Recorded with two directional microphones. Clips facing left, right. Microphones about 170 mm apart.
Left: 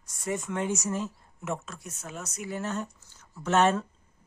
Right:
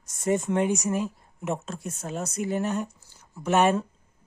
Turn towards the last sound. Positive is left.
turn(degrees=-10)  # may be behind; listen again after turning